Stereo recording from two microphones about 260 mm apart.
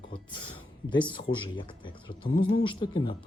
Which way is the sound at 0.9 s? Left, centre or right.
Centre.